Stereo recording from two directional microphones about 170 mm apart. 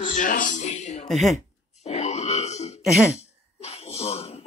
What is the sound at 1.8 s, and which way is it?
Grunt, 40° left (ahead or behind).